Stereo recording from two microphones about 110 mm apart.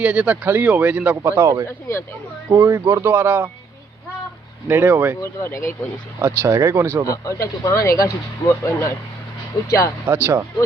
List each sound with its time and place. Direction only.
0.0 s speech: 15° right (ahead or behind)
1.6 s speech: 25° left (ahead or behind)
2.5 s speech: 25° right (ahead or behind)
4.7 s speech: 20° right (ahead or behind)
5.2 s speech: 25° left (ahead or behind)
6.1 s speech: 25° right (ahead or behind)
7.1 s speech: 30° left (ahead or behind)